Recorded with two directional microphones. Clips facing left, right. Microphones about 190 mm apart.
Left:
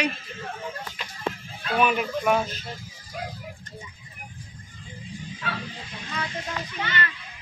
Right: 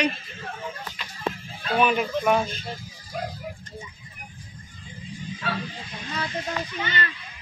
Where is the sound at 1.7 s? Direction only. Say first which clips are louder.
Right 1 dB; 5° left (ahead or behind).